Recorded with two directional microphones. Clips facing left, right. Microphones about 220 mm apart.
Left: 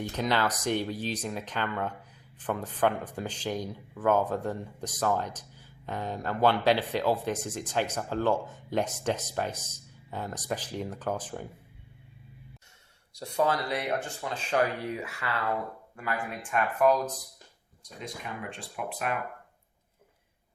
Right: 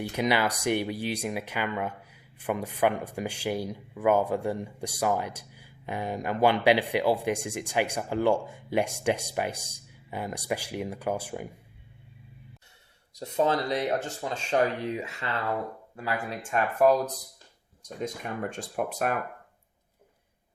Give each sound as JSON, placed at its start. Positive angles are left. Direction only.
{"t": 0.0, "sound": "a man's voice", "side_deg": -10}
{"t": 13.1, "sound": "speech", "side_deg": -20}
{"t": 16.0, "sound": "speech", "side_deg": -35}
{"t": 17.8, "sound": "speech", "side_deg": -45}